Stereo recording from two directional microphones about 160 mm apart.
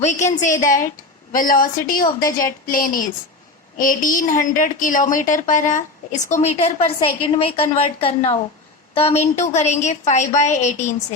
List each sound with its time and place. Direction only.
0.0 s a woman's voice: 45° left (ahead or behind)